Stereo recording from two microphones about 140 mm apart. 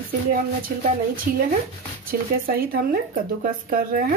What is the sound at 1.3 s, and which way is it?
Speech, 90° right.